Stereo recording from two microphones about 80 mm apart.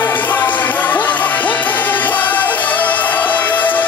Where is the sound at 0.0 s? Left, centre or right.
Left.